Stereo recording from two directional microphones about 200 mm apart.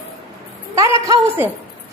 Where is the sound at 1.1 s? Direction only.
10° right (ahead or behind).